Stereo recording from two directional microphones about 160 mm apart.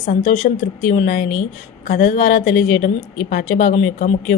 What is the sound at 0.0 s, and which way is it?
A woman's voice, 50° left (ahead or behind).